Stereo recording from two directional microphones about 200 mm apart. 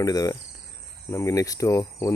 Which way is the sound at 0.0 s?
15° left (ahead or behind).